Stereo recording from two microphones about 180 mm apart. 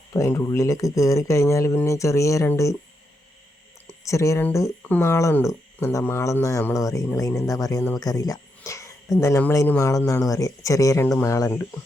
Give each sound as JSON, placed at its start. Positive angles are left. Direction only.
{"t": 0.1, "sound": "speech", "side_deg": 15}
{"t": 4.0, "sound": "speech", "side_deg": 15}